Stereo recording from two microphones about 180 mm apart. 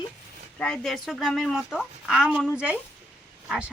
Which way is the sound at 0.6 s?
5° left (ahead or behind).